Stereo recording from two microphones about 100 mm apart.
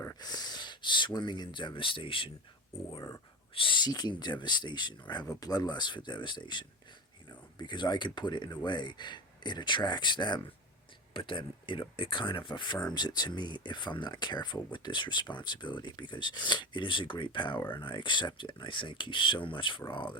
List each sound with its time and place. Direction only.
0.2 s speech: 40° left (ahead or behind); by 2.3 s 60° left (ahead or behind)
3.5 s speech: 60° left (ahead or behind)